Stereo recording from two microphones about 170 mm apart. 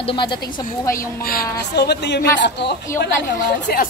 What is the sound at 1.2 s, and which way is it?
A woman's voice, 60° left (ahead or behind).